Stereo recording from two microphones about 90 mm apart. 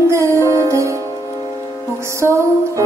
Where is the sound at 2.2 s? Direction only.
30° right (ahead or behind).